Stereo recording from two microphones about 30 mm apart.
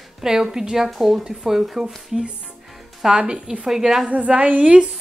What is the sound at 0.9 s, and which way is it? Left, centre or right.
Speech, centre.